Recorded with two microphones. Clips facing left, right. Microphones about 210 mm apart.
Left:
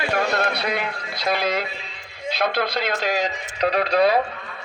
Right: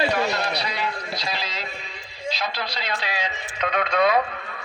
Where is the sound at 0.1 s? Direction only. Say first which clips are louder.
Left 2 dB; 55° left (ahead or behind).